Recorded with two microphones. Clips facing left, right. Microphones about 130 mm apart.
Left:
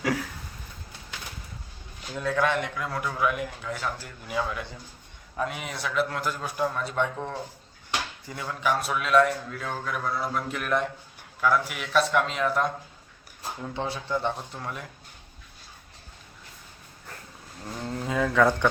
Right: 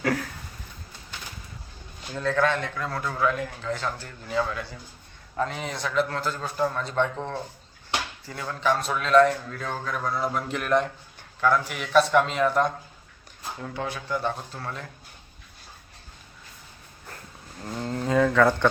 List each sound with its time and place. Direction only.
0.0 s a man's voice: 10° left (ahead or behind)
2.1 s a man's voice: 10° left (ahead or behind)
13.7 s speech: 25° left (ahead or behind)
17.6 s speech: centre (ahead or behind)